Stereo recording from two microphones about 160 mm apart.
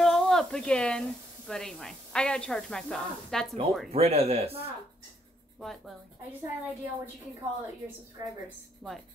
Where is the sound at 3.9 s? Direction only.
40° right (ahead or behind).